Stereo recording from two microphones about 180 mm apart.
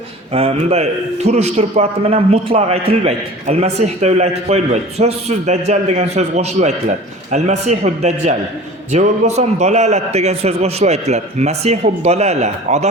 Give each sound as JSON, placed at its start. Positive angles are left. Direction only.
{"t": 0.3, "sound": "a man's voice", "side_deg": -35}